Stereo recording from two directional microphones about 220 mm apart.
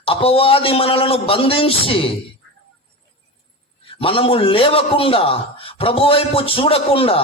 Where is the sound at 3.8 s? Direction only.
25° left (ahead or behind).